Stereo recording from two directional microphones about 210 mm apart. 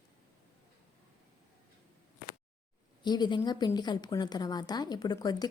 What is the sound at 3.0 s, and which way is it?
A woman's voice, 20° left (ahead or behind).